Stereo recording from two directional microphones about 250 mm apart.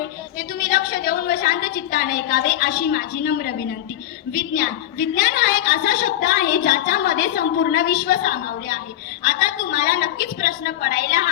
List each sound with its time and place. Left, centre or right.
0.3 s a woman's voice: left